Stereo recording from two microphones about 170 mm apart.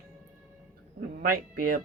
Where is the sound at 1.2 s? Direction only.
55° right (ahead or behind).